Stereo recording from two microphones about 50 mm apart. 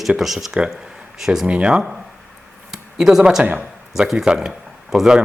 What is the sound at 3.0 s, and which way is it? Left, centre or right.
Speech, centre.